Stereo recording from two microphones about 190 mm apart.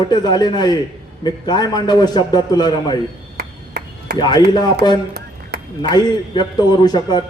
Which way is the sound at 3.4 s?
60° right (ahead or behind).